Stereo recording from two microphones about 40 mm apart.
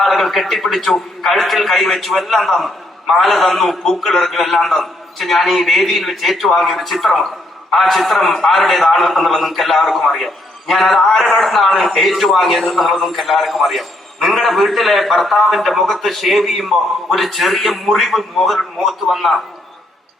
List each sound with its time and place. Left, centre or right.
0.0 s a man's voice: centre